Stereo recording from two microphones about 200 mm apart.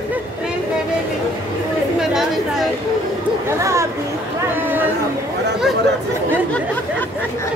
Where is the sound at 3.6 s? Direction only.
15° right (ahead or behind).